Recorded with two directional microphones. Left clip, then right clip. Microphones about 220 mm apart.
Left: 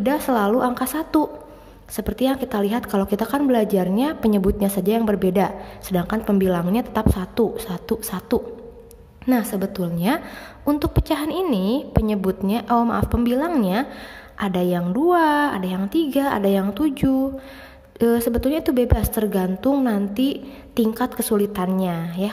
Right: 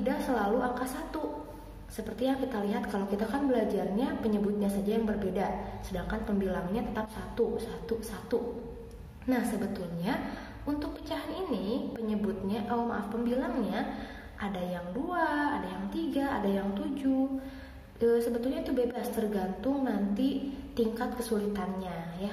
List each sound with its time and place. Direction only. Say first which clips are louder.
0.0 s a woman's voice: left 10 dB; 50° left (ahead or behind)
9.2 s a woman's voice: left 9 dB; 50° left (ahead or behind)